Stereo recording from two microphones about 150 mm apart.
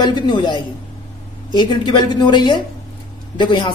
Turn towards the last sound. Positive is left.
turn(degrees=30)  # may be behind; listen again after turning